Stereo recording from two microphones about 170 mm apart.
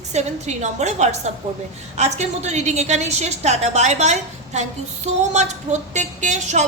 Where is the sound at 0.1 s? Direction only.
40° right (ahead or behind).